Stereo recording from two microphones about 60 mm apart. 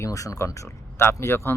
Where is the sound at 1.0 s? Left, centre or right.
Left.